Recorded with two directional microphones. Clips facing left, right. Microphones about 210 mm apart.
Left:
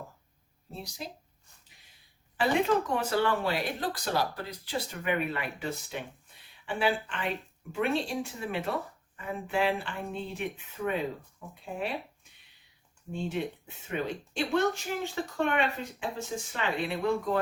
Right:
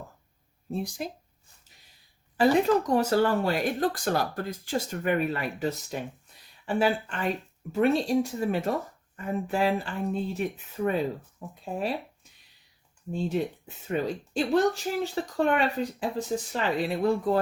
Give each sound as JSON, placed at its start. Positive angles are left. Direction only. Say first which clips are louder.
{"t": 0.7, "sound": "speech", "louder": "right 9 dB", "side_deg": -50}
{"t": 2.4, "sound": "speech", "louder": "right 5 dB", "side_deg": -40}
{"t": 13.1, "sound": "speech", "louder": "right 4 dB", "side_deg": -35}